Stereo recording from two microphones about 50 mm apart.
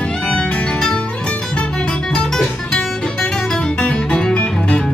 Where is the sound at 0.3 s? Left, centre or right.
Centre.